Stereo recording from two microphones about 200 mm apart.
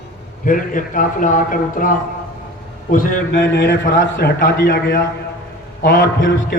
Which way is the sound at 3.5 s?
60° left (ahead or behind).